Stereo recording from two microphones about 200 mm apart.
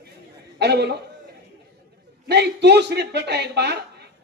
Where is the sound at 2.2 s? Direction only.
55° right (ahead or behind).